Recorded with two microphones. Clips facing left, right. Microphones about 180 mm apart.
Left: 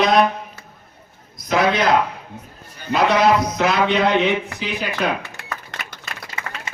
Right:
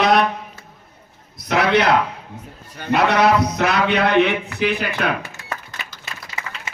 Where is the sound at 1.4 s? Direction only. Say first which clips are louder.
Right 1 dB; 65° right (ahead or behind).